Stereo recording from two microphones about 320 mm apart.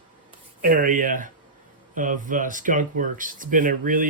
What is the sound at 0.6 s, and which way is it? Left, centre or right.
Speech, right.